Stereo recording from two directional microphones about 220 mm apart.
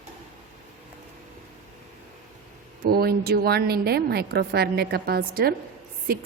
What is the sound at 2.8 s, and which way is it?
A woman's voice, 45° right (ahead or behind).